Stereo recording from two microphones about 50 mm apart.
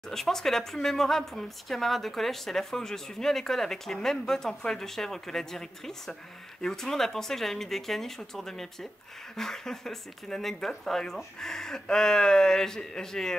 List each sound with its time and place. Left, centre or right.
0.1 s speech: centre